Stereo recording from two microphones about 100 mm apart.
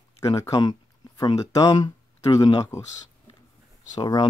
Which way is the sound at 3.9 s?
40° left (ahead or behind).